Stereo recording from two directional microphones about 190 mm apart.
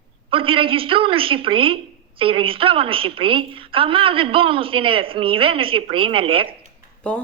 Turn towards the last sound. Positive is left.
turn(degrees=5)  # may be behind; listen again after turning